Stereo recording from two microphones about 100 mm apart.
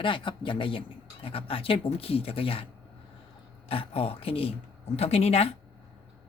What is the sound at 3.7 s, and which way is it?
Speech, 70° left (ahead or behind).